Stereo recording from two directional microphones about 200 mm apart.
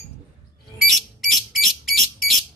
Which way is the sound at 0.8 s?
Centre (ahead or behind).